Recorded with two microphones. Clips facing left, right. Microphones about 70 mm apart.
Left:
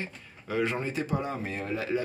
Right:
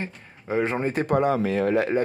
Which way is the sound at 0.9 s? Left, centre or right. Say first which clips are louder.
Right 9 dB; right.